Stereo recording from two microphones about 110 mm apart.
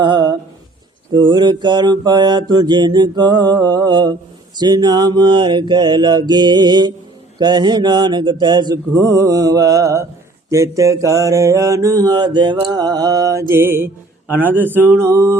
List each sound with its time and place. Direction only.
0.0 s a sound: 45° right (ahead or behind)
1.1 s mantra: 40° right (ahead or behind); by 13.8 s 20° right (ahead or behind)
14.3 s speech: 15° left (ahead or behind)
14.6 s mantra: 20° right (ahead or behind)